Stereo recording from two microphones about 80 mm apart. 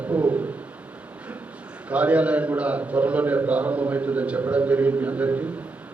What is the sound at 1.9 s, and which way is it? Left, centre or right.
A man's voice, centre.